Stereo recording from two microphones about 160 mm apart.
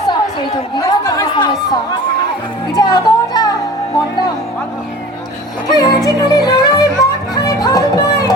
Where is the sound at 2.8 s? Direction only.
25° left (ahead or behind).